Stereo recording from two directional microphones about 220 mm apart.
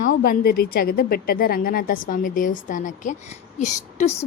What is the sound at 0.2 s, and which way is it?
A woman's voice, 45° left (ahead or behind).